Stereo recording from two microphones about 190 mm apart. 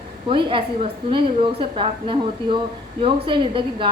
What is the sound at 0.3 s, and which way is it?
A woman's voice, 25° right (ahead or behind).